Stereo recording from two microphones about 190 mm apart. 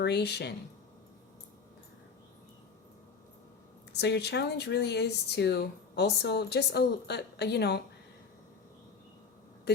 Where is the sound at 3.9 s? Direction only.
60° left (ahead or behind).